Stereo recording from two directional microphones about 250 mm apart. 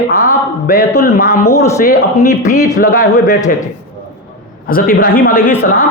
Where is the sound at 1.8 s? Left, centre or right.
Left.